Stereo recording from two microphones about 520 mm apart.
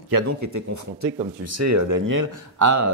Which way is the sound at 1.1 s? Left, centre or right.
Centre.